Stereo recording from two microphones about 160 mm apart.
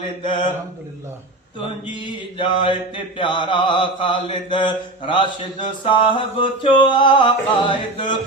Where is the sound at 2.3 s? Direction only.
30° left (ahead or behind).